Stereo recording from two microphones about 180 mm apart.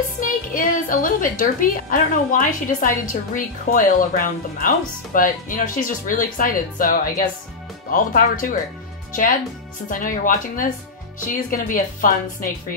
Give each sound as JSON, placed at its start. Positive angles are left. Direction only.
{"t": 0.6, "sound": "a woman's voice", "side_deg": 50}